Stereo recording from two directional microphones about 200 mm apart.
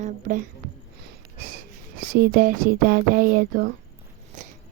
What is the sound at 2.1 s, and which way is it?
Speech, 55° right (ahead or behind).